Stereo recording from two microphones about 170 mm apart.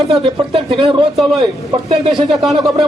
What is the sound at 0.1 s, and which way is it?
Speech, 35° right (ahead or behind).